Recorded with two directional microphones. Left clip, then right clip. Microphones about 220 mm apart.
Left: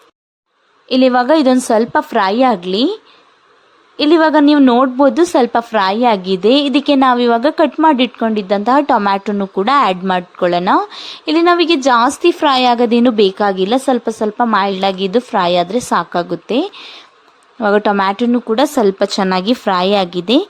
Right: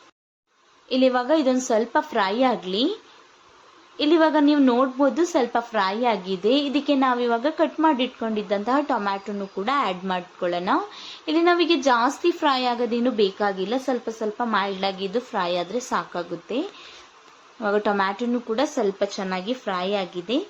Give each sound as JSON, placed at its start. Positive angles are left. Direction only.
{"t": 0.9, "sound": "a woman's voice", "side_deg": 45}